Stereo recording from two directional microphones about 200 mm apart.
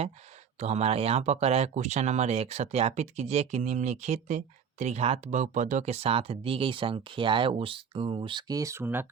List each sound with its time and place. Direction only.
0.6 s speech: 30° right (ahead or behind); by 9.0 s 10° right (ahead or behind)